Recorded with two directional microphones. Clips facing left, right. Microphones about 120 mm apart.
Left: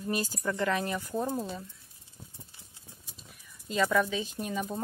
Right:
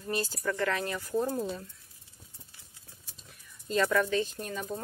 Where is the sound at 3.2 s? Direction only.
5° left (ahead or behind).